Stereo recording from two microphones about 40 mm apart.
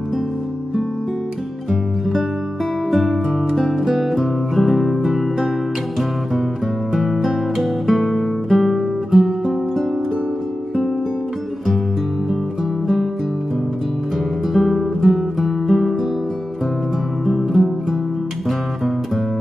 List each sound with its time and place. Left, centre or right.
1.7 s music: centre
7.0 s music: centre
12.8 s music: centre
14.5 s music: centre
17.3 s music: centre